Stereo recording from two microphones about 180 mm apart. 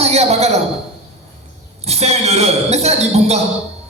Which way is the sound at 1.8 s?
35° right (ahead or behind).